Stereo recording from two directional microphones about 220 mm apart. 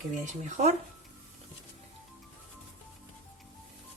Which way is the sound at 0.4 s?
35° right (ahead or behind).